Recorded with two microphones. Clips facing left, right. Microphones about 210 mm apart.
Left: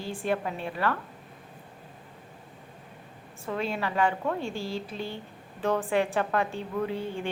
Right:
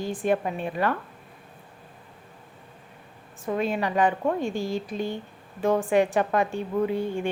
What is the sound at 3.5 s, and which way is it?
A woman's voice, 15° right (ahead or behind).